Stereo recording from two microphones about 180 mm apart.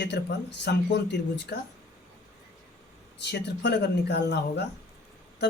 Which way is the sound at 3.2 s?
70° left (ahead or behind).